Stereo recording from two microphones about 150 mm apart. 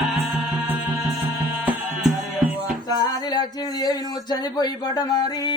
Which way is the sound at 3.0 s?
25° left (ahead or behind).